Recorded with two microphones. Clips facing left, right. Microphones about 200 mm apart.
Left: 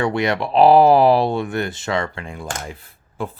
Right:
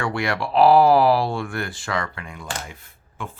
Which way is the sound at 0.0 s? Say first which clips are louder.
Left 5 dB; 20° left (ahead or behind).